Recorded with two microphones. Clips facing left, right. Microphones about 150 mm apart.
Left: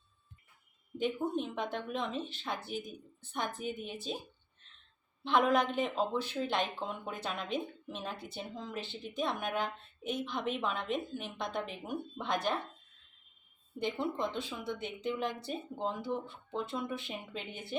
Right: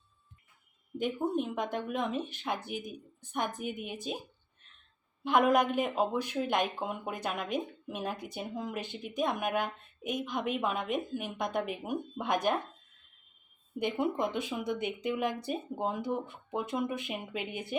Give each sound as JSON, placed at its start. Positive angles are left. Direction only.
{"t": 0.9, "sound": "speech", "side_deg": -10}
{"t": 5.2, "sound": "speech", "side_deg": -10}
{"t": 13.9, "sound": "speech", "side_deg": -15}